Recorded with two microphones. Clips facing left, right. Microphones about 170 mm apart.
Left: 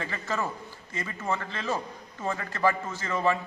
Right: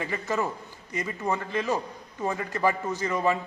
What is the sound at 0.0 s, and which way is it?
A man's voice, 15° right (ahead or behind).